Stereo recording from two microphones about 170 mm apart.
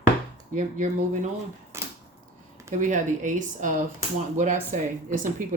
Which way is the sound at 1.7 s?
15° right (ahead or behind).